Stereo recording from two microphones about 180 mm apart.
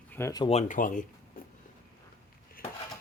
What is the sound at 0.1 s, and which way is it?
Speech, 15° left (ahead or behind).